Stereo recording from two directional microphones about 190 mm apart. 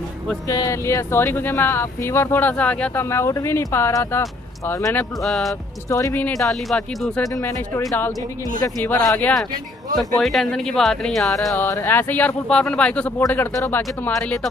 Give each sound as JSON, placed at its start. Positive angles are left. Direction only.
{"t": 0.5, "sound": "speech", "side_deg": 15}
{"t": 5.2, "sound": "speech", "side_deg": 0}
{"t": 5.9, "sound": "speech", "side_deg": 15}
{"t": 7.2, "sound": "speech", "side_deg": 15}
{"t": 11.6, "sound": "speech", "side_deg": 10}